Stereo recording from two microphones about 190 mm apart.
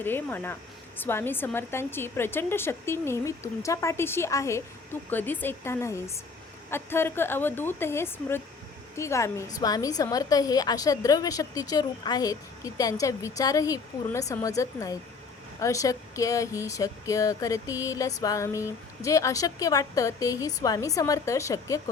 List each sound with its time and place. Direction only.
0.0 s speech: 10° left (ahead or behind)